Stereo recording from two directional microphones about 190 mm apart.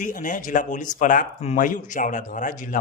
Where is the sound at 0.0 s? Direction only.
45° left (ahead or behind).